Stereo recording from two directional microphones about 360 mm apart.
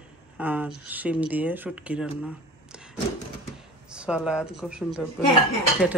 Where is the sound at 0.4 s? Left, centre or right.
Centre.